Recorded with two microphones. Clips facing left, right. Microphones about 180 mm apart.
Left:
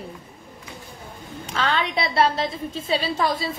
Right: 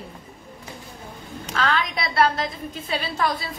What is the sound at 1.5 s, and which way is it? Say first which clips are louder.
A woman's voice: left 1 dB; 30° left (ahead or behind).